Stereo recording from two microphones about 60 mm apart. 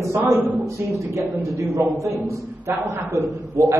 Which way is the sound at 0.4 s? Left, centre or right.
Right.